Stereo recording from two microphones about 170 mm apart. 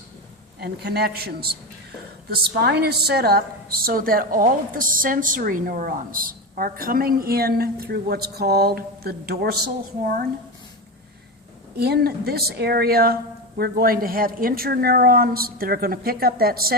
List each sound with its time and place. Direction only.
0.6 s a man's voice: 70° right (ahead or behind)
10.0 s a woman's voice: 60° right (ahead or behind)
11.8 s a woman's voice: 65° right (ahead or behind)